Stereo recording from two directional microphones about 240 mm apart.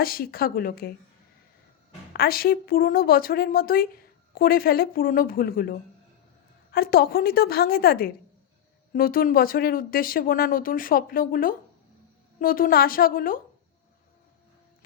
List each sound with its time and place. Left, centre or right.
0.0 s speech: left
2.1 s speech: left